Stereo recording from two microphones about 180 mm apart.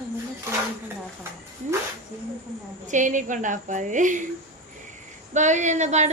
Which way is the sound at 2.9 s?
45° right (ahead or behind).